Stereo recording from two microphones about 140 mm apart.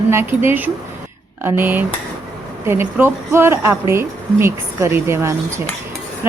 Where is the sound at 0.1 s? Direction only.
15° right (ahead or behind).